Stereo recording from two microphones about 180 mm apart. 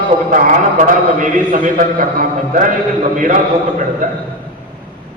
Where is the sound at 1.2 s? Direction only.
45° right (ahead or behind).